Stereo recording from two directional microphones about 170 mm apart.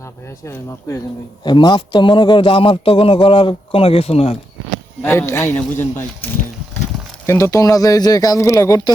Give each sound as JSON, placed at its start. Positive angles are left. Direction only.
{"t": 0.0, "sound": "speech", "side_deg": 15}
{"t": 1.5, "sound": "a man's voice", "side_deg": 25}
{"t": 5.0, "sound": "speech", "side_deg": 15}
{"t": 7.3, "sound": "speech", "side_deg": 15}